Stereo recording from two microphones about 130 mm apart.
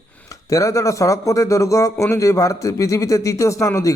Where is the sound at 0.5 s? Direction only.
25° left (ahead or behind).